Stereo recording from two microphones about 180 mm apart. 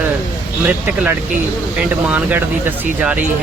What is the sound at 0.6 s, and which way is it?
Speech, 10° right (ahead or behind).